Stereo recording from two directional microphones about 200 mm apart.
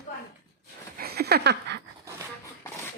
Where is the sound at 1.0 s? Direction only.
50° right (ahead or behind).